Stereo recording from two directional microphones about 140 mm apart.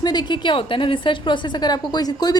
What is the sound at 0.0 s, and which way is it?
A woman's voice, 30° left (ahead or behind).